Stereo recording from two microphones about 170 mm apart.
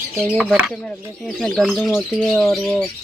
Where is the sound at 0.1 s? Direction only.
Centre (ahead or behind).